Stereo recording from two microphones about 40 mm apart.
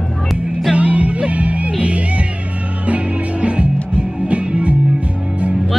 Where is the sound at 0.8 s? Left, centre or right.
Right.